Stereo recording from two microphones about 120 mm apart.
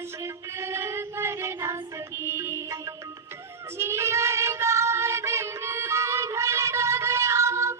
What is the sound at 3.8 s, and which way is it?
Child singing, 20° right (ahead or behind).